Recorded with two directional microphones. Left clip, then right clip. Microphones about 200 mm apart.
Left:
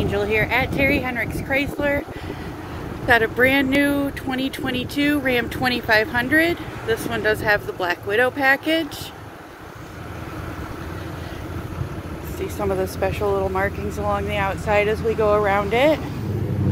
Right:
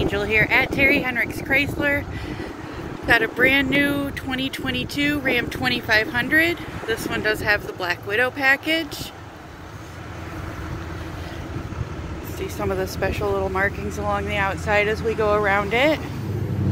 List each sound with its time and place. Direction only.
0.0 s speech: 5° left (ahead or behind)
3.1 s speech: 25° left (ahead or behind)
12.4 s speech: 10° left (ahead or behind)